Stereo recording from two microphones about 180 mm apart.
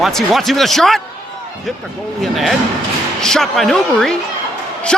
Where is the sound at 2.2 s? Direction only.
Centre (ahead or behind).